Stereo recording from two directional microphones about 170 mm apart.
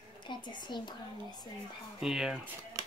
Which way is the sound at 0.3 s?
25° left (ahead or behind).